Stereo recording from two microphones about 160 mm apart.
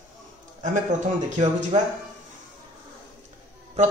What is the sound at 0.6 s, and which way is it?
Speech, 50° right (ahead or behind).